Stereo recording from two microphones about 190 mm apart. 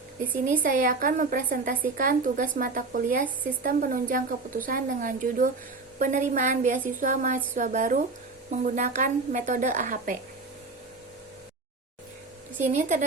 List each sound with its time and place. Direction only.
0.6 s a woman's voice: 50° right (ahead or behind)
12.7 s a woman's voice: 40° right (ahead or behind)